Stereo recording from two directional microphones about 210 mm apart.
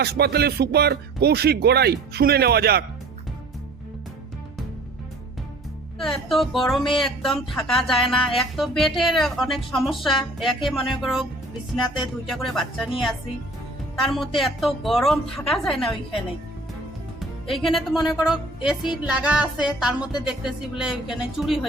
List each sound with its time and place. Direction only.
0.0 s speech: 50° right (ahead or behind)
6.0 s a woman's voice: centre (ahead or behind)
12.3 s a woman's voice: centre (ahead or behind)
17.5 s a woman's voice: centre (ahead or behind)